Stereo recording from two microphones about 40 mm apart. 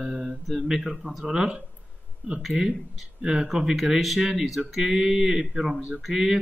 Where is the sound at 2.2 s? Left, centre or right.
Right.